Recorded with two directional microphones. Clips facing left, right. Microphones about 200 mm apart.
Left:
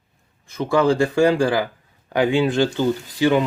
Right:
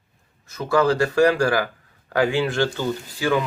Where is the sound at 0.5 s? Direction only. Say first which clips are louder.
Left 2 dB; 20° left (ahead or behind).